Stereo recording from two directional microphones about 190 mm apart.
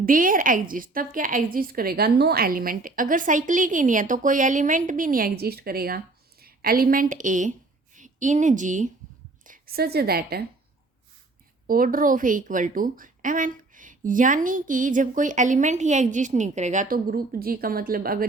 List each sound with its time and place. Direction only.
0.0 s a woman's voice: 45° right (ahead or behind)
11.6 s a woman's voice: 45° right (ahead or behind)